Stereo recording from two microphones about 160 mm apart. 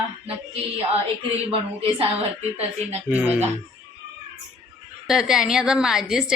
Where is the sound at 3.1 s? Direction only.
10° right (ahead or behind).